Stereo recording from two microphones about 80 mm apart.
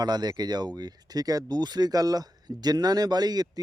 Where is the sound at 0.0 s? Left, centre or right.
Right.